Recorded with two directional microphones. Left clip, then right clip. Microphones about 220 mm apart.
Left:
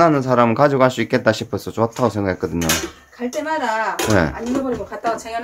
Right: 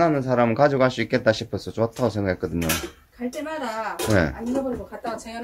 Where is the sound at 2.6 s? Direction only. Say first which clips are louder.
Left 6 dB; 20° left (ahead or behind).